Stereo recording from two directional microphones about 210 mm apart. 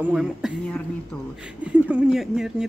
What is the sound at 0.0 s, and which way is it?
Speech, 5° right (ahead or behind).